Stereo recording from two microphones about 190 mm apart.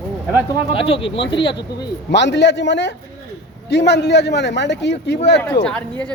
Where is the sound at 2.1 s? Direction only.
65° left (ahead or behind).